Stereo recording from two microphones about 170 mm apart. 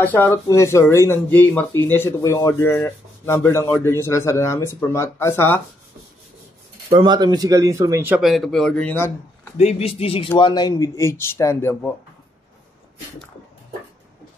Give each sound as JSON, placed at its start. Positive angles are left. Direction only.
{"t": 0.0, "sound": "speech", "side_deg": 10}
{"t": 6.9, "sound": "speech", "side_deg": -25}
{"t": 8.2, "sound": "speech", "side_deg": 0}
{"t": 9.6, "sound": "speech", "side_deg": 40}